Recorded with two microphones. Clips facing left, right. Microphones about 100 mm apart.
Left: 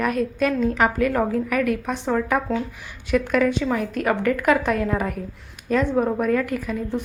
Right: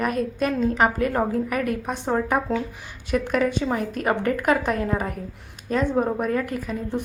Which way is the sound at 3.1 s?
40° right (ahead or behind).